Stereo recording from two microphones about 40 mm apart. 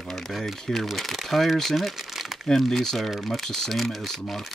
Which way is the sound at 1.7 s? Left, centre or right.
Centre.